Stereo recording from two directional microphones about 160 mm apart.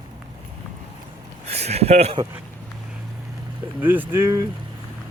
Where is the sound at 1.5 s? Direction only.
40° right (ahead or behind).